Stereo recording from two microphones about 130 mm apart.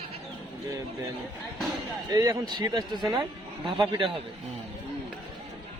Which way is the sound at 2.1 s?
30° right (ahead or behind).